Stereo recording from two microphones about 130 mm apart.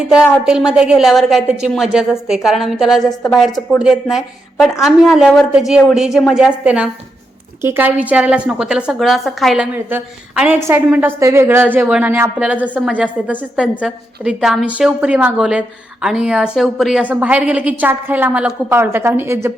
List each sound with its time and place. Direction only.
0.0 s a woman's voice: 5° right (ahead or behind)
4.6 s a woman's voice: centre (ahead or behind)
9.7 s a woman's voice: 10° right (ahead or behind)